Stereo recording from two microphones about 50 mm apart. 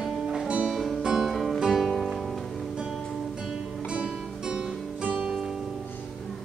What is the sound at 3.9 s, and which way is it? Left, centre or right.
Music, centre.